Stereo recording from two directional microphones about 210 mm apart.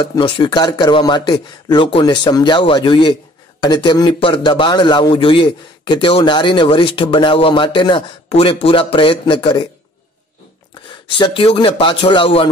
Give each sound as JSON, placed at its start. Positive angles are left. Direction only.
{"t": 0.0, "sound": "a man's voice", "side_deg": 25}
{"t": 11.1, "sound": "a man's voice", "side_deg": 25}